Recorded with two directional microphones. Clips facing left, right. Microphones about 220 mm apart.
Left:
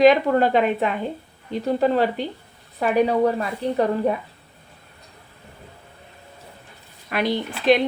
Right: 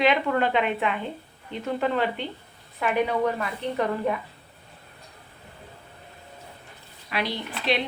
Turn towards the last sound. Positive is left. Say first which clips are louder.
# left 9 dB
turn(degrees=50)  # may be behind; listen again after turning